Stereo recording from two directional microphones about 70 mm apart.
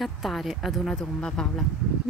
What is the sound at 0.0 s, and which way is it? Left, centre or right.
Speech, centre.